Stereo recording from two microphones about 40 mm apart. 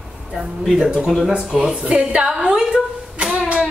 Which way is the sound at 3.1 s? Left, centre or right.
Right.